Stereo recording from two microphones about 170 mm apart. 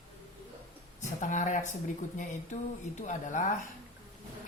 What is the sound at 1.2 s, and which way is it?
Speech, 45° left (ahead or behind).